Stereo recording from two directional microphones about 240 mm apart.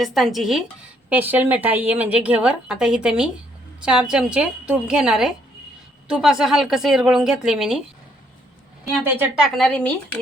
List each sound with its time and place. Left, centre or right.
0.0 s a woman's voice: centre
9.1 s a woman's voice: centre